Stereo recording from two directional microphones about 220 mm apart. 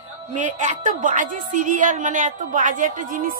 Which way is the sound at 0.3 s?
35° right (ahead or behind).